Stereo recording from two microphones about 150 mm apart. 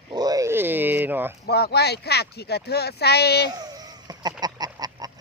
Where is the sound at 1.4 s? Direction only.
90° left.